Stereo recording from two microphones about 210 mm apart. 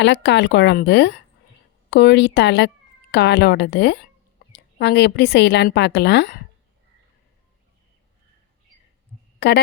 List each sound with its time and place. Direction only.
0.0 s a woman's voice: 55° left (ahead or behind)
9.4 s a woman's voice: 50° left (ahead or behind)